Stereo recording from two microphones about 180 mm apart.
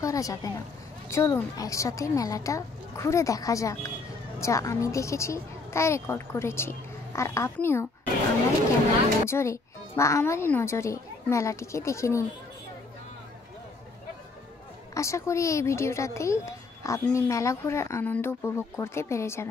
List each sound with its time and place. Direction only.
0.0 s a woman's voice: 20° left (ahead or behind)
9.2 s a child's voice: 15° left (ahead or behind)
15.0 s a child's voice: 15° left (ahead or behind)